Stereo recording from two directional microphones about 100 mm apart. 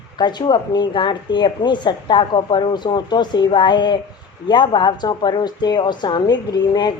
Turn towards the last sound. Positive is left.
turn(degrees=45)  # may be behind; listen again after turning